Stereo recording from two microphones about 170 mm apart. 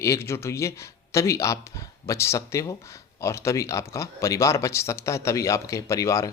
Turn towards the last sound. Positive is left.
turn(degrees=20)  # may be behind; listen again after turning